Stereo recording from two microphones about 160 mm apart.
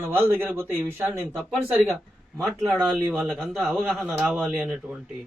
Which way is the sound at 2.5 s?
10° right (ahead or behind).